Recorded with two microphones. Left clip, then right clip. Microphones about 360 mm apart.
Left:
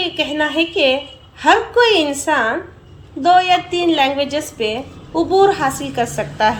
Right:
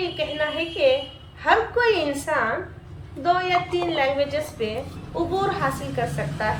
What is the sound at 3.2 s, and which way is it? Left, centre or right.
A woman's voice, centre.